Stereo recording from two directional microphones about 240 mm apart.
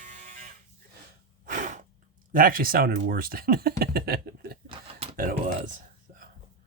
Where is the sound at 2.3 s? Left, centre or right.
Right.